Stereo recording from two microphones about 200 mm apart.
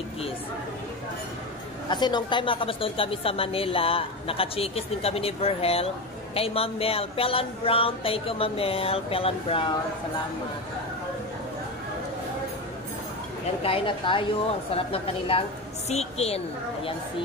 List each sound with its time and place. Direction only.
1.9 s speech: 20° left (ahead or behind)
13.6 s a woman's voice: 30° left (ahead or behind)